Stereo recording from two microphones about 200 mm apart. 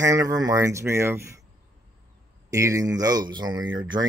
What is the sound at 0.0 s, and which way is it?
Speech, 15° right (ahead or behind).